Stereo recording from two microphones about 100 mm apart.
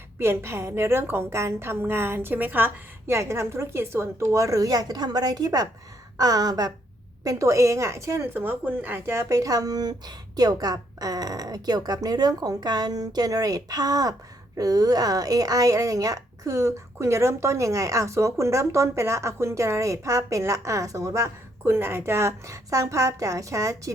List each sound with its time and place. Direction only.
0.2 s a woman's voice: 25° right (ahead or behind)